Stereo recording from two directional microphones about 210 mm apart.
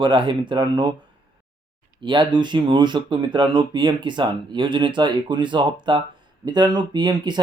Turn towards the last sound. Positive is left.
turn(degrees=-20)  # may be behind; listen again after turning